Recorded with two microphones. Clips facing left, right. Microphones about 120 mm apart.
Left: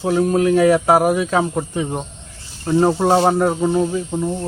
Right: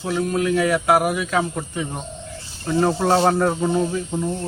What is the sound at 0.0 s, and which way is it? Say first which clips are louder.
Speech: left 6 dB; 35° left (ahead or behind).